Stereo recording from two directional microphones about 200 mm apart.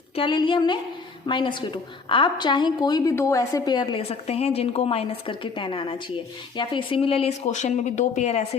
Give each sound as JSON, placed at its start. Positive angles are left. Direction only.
{"t": 0.2, "sound": "a woman's voice", "side_deg": 25}